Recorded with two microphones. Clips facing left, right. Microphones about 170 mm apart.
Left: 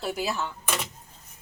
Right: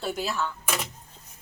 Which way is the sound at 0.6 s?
Centre (ahead or behind).